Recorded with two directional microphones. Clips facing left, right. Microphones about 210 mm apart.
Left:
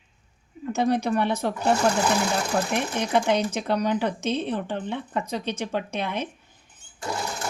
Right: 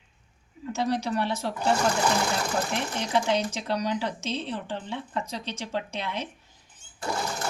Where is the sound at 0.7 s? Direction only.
55° left (ahead or behind).